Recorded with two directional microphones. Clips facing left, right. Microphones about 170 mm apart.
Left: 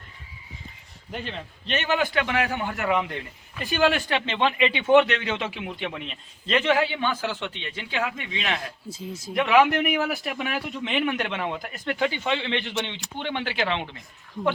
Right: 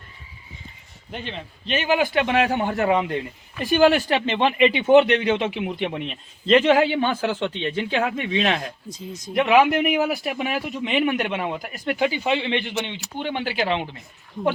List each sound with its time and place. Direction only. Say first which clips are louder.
1.1 s a man's voice: right 1 dB; centre (ahead or behind); by 3.2 s 25° right (ahead or behind)
3.6 s speech: right 6 dB; 35° right (ahead or behind)
4.3 s speech: right 5 dB; 25° right (ahead or behind)
6.9 s a man's voice: right 5 dB; 45° right (ahead or behind)
7.9 s speech: right 1 dB; 30° right (ahead or behind)
8.9 s a man's voice: even; 5° left (ahead or behind)
9.3 s a man's voice: right 2 dB; 20° right (ahead or behind)